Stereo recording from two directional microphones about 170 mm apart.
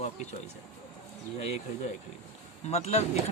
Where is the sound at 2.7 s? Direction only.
40° left (ahead or behind).